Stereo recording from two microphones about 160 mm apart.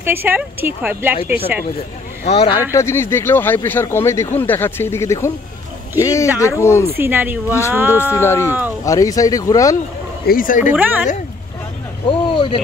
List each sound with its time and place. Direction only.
0.0 s speech: 15° right (ahead or behind)
2.2 s speech: 35° left (ahead or behind)
2.7 s speech: 15° left (ahead or behind)
7.0 s speech: 15° right (ahead or behind)
8.1 s speech: 15° left (ahead or behind)
8.5 s speech: 10° right (ahead or behind)
8.8 s speech: 20° left (ahead or behind)
10.2 s speech: 60° left (ahead or behind)
10.6 s speech: 10° right (ahead or behind)
12.1 s vehicle: 30° left (ahead or behind)